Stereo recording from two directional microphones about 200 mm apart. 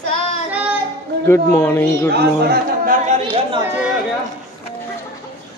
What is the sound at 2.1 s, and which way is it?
A man's voice, 50° right (ahead or behind).